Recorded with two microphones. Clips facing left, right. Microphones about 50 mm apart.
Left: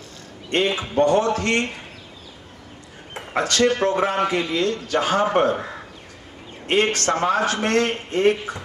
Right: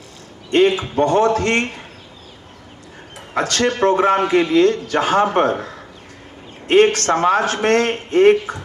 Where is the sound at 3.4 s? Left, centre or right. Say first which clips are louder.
Right 1 dB; right.